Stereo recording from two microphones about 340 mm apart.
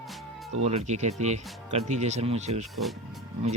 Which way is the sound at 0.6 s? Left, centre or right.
Centre.